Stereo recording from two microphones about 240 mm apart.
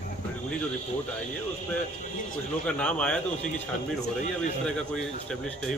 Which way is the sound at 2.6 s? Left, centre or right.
Centre.